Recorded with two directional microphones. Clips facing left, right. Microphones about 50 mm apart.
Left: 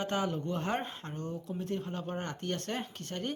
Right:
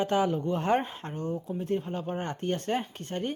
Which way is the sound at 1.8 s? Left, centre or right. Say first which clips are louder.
Right 4 dB; centre.